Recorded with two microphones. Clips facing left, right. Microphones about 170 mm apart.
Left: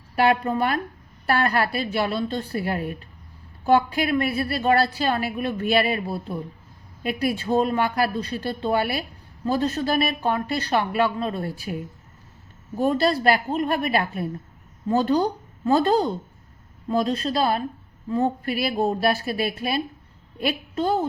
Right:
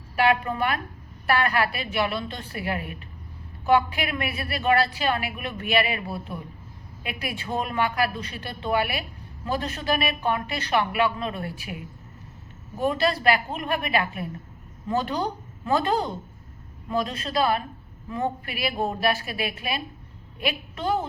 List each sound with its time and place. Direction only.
0.2 s a woman's voice: 40° left (ahead or behind)
12.8 s a woman's voice: 35° left (ahead or behind)